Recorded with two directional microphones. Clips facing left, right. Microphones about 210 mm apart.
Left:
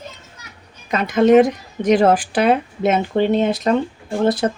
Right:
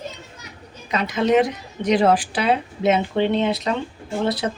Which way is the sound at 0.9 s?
50° left (ahead or behind).